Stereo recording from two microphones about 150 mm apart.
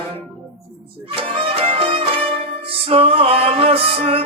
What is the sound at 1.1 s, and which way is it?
Music, 35° right (ahead or behind).